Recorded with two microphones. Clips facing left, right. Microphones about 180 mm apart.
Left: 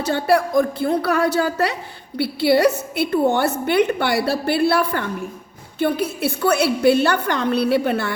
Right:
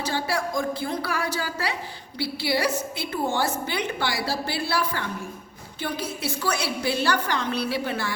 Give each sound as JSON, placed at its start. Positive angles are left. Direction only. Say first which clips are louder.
{"t": 0.1, "sound": "a woman's voice", "louder": "left 11 dB", "side_deg": 60}